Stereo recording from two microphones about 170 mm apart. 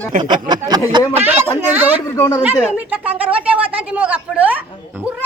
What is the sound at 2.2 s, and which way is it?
Speech, 20° left (ahead or behind).